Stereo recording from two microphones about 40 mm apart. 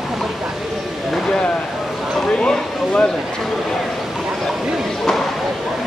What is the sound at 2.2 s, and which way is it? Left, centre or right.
Speech, centre.